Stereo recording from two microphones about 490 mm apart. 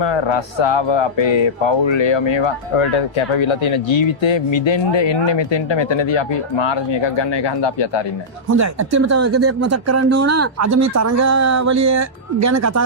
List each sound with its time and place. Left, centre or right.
0.0 s speech: left
8.4 s speech: right